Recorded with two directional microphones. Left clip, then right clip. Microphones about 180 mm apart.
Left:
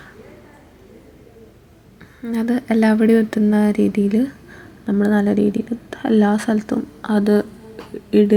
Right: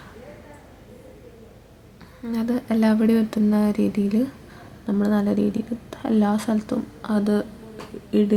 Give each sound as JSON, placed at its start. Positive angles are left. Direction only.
{"t": 2.3, "sound": "a woman's voice", "side_deg": 20}